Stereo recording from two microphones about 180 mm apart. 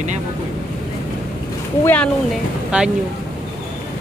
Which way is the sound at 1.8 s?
10° left (ahead or behind).